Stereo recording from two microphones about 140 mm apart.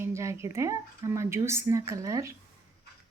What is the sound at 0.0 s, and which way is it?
A woman's voice, 20° right (ahead or behind).